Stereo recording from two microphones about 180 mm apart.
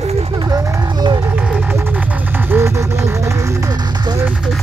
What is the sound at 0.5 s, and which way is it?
Speech, 20° right (ahead or behind).